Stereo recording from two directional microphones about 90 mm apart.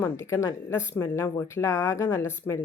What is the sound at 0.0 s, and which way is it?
Speech, 30° left (ahead or behind).